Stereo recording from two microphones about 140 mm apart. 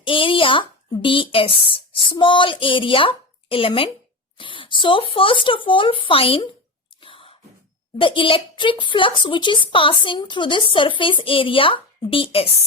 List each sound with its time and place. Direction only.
0.0 s speech: 40° left (ahead or behind)
7.0 s a sound: 40° left (ahead or behind)
7.9 s speech: 35° left (ahead or behind)